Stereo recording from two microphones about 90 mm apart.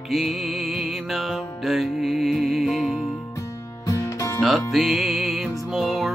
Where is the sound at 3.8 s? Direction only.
35° left (ahead or behind).